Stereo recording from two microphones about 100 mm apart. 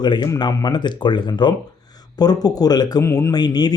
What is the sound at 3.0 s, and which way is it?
Speech, 30° left (ahead or behind).